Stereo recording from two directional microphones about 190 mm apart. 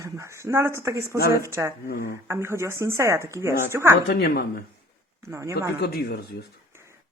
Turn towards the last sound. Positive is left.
turn(degrees=55)  # may be behind; listen again after turning